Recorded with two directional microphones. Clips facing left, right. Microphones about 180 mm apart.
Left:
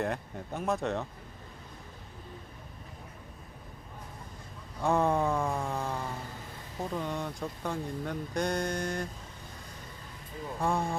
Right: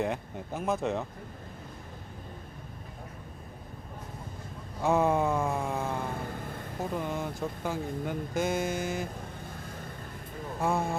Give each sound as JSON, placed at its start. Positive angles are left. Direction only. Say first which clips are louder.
{"t": 0.0, "sound": "speech", "louder": "right 2 dB", "side_deg": 0}
{"t": 4.8, "sound": "a sound", "louder": "right 2 dB", "side_deg": -5}
{"t": 6.0, "sound": "vehicle", "louder": "right 4 dB", "side_deg": -55}
{"t": 6.9, "sound": "speech", "louder": "right 1 dB", "side_deg": -5}
{"t": 10.6, "sound": "speech", "louder": "right 1 dB", "side_deg": -5}